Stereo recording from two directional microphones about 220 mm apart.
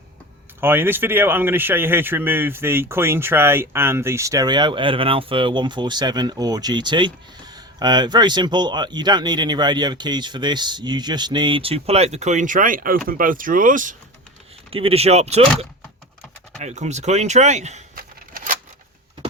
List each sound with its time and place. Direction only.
0.6 s speech: 10° right (ahead or behind); by 13.9 s 35° right (ahead or behind)
14.7 s speech: 25° right (ahead or behind)
16.6 s speech: 30° right (ahead or behind)